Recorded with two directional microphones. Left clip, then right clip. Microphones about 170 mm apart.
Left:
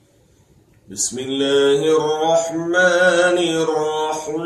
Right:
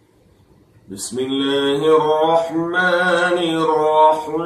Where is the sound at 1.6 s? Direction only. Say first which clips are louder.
Left 2 dB; 50° left (ahead or behind).